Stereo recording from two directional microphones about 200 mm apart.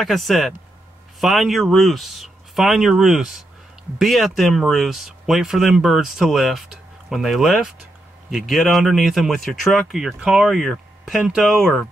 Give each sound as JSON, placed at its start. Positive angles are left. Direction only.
{"t": 0.0, "sound": "speech", "side_deg": 0}